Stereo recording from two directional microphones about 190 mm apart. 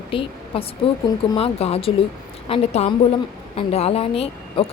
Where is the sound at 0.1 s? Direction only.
30° left (ahead or behind).